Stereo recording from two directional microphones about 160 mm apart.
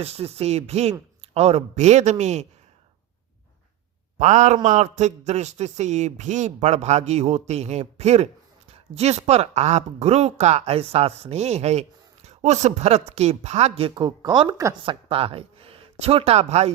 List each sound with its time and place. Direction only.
0.0 s speech: 40° right (ahead or behind)
4.2 s speech: 45° right (ahead or behind); by 14.9 s 25° right (ahead or behind)
15.1 s speech: 35° right (ahead or behind)